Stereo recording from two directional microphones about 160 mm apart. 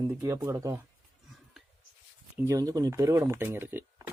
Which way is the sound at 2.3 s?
15° right (ahead or behind).